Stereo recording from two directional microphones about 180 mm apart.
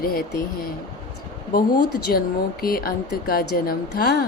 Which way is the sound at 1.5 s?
55° left (ahead or behind).